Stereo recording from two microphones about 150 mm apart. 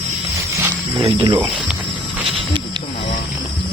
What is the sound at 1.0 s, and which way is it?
Speech, 35° right (ahead or behind).